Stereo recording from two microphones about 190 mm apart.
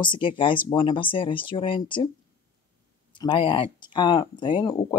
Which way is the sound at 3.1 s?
25° left (ahead or behind).